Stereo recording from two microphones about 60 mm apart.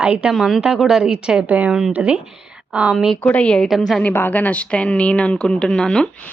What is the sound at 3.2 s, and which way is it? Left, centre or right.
Speech, left.